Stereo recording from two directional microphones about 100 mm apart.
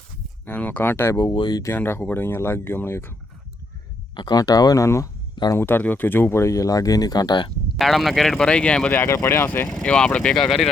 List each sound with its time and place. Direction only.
0.4 s speech: 15° left (ahead or behind)
1.3 s speech: 50° left (ahead or behind)
1.7 s speech: 25° left (ahead or behind)
4.1 s speech: 45° left (ahead or behind); by 5.1 s 30° left (ahead or behind)
5.3 s a sound: 45° left (ahead or behind)
5.5 s speech: 20° left (ahead or behind); by 7.5 s 50° left (ahead or behind)
7.8 s speech: centre (ahead or behind); by 9.6 s 20° left (ahead or behind)
9.6 s speech: 5° left (ahead or behind)